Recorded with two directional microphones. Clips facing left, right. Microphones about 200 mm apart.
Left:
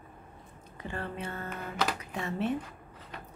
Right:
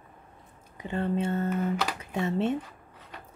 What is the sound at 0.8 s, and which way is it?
Speech, 20° right (ahead or behind).